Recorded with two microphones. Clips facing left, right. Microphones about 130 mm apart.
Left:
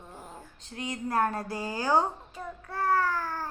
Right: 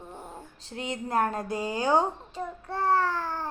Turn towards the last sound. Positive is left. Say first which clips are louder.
# right 1 dB
turn(degrees=-25)  # may be behind; listen again after turning